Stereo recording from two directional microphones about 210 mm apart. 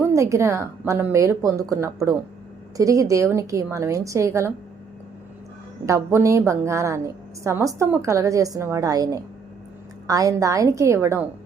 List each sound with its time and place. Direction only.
0.0 s a woman's voice: 15° right (ahead or behind)
5.8 s a woman's voice: 15° right (ahead or behind)